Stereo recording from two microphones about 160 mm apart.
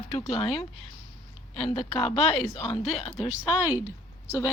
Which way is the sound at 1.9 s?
35° left (ahead or behind).